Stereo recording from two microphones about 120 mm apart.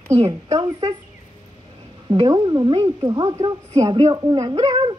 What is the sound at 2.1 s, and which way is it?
A woman's voice, 40° right (ahead or behind).